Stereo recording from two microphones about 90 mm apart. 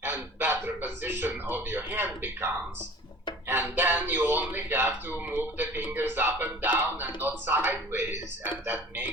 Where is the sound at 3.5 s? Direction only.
25° right (ahead or behind).